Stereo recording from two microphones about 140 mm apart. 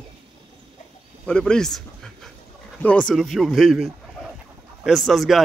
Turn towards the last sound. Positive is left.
turn(degrees=0)  # may be behind; listen again after turning